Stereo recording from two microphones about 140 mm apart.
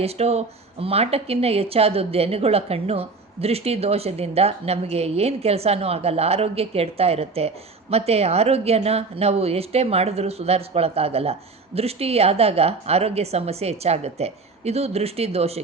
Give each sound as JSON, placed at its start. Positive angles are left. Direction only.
{"t": 0.0, "sound": "a woman's voice", "side_deg": -50}